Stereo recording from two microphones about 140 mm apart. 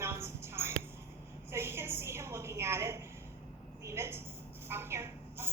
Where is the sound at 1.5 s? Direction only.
15° right (ahead or behind).